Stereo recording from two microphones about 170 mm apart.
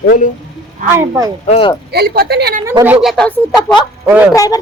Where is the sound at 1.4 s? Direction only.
35° left (ahead or behind).